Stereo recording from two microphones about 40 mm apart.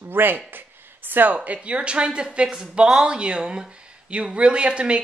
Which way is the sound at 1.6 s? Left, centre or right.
Right.